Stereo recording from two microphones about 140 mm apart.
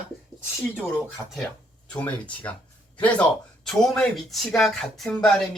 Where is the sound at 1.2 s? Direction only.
20° right (ahead or behind).